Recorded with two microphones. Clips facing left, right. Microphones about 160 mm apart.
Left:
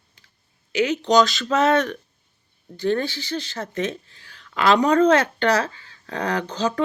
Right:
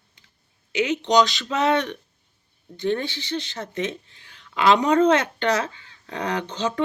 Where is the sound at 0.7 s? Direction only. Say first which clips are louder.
Left 2 dB; 20° right (ahead or behind).